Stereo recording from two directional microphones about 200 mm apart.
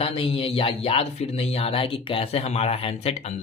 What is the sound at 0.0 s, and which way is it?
Speech, 30° left (ahead or behind).